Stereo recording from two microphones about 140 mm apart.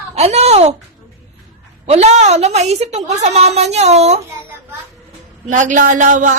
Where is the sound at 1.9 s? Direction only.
50° right (ahead or behind).